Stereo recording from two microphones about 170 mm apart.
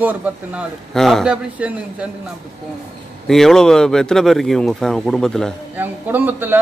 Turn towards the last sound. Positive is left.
turn(degrees=-10)  # may be behind; listen again after turning